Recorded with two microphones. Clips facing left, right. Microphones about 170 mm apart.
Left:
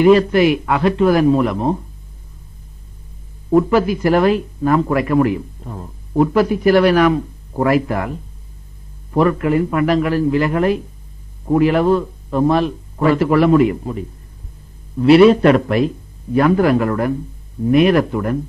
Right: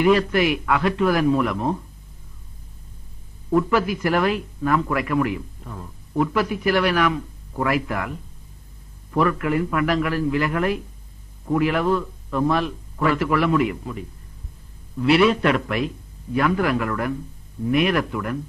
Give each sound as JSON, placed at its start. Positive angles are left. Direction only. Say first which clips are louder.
{"t": 0.0, "sound": "a man's voice", "louder": "left 7 dB", "side_deg": 30}
{"t": 3.4, "sound": "a man's voice", "louder": "left 6 dB", "side_deg": 30}